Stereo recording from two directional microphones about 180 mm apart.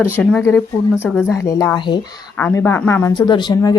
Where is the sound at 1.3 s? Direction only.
20° left (ahead or behind).